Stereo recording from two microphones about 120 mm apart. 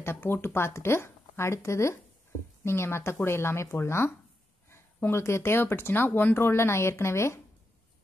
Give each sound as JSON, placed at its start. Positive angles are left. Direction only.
{"t": 0.0, "sound": "speech", "side_deg": 20}